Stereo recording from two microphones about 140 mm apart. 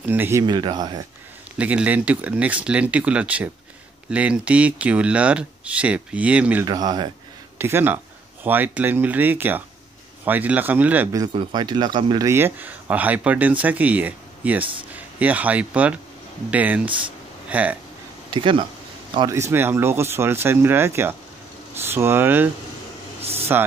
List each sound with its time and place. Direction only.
0.1 s speech: 15° right (ahead or behind)
0.5 s speech: 30° right (ahead or behind)
1.6 s speech: 10° right (ahead or behind)
6.6 s speech: 30° right (ahead or behind)
7.5 s speech: 15° right (ahead or behind)
11.3 s speech: 35° right (ahead or behind)
12.3 s speech: 15° right (ahead or behind)
18.3 s speech: 35° right (ahead or behind)
19.1 s speech: 20° right (ahead or behind)
23.5 s speech: 15° right (ahead or behind)